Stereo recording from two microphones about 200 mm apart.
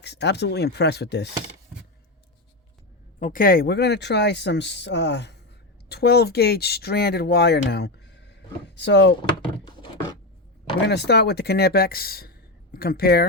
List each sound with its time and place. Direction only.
0.0 s speech: 60° left (ahead or behind)
3.2 s speech: 45° left (ahead or behind); by 9.1 s 60° left (ahead or behind)
9.6 s a sound: 20° left (ahead or behind)
10.8 s speech: 55° left (ahead or behind)